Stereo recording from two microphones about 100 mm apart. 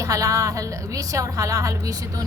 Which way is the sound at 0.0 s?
35° right (ahead or behind).